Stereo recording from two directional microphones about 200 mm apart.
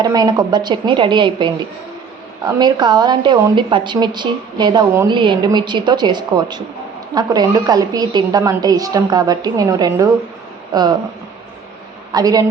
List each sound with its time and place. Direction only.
0.0 s a woman's voice: 20° right (ahead or behind)
12.1 s a woman's voice: 20° right (ahead or behind)